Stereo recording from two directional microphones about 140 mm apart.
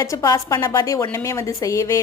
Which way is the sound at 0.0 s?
20° left (ahead or behind).